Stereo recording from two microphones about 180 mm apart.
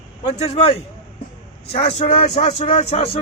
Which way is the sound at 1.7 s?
35° left (ahead or behind).